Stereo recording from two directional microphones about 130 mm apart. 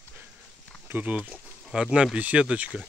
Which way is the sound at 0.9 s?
10° right (ahead or behind).